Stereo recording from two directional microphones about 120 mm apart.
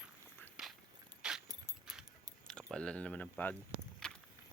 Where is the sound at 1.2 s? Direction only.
5° right (ahead or behind).